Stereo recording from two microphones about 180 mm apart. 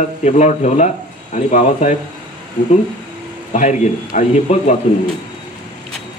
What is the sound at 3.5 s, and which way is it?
Speech, 45° left (ahead or behind).